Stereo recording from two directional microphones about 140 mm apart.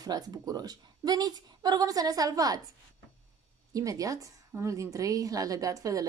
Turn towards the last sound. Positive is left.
turn(degrees=-25)  # may be behind; listen again after turning